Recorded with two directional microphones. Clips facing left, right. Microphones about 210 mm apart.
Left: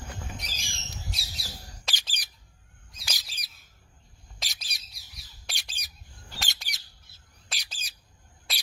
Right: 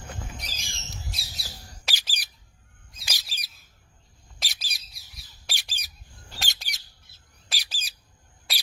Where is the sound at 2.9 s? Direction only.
Centre (ahead or behind).